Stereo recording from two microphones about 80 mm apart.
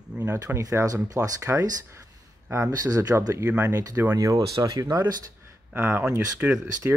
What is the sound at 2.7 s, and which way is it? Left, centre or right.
Speech, right.